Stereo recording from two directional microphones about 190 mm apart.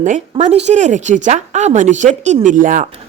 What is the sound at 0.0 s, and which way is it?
A woman's voice, 40° right (ahead or behind).